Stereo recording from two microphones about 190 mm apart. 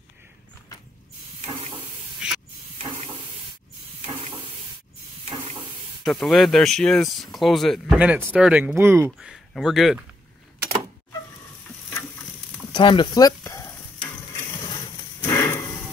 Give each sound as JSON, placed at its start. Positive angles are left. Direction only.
{"t": 1.4, "sound": "a sound", "side_deg": -30}
{"t": 2.2, "sound": "hiss", "side_deg": -5}
{"t": 2.8, "sound": "stir", "side_deg": -35}
{"t": 4.0, "sound": "a sound", "side_deg": -30}
{"t": 5.3, "sound": "stir", "side_deg": -35}
{"t": 6.0, "sound": "speech", "side_deg": 0}
{"t": 9.3, "sound": "speech", "side_deg": 0}
{"t": 12.7, "sound": "stir", "side_deg": 25}
{"t": 15.2, "sound": "a sound", "side_deg": 15}